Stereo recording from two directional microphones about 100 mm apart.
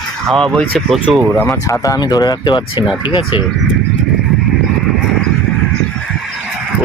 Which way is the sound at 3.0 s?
55° left (ahead or behind).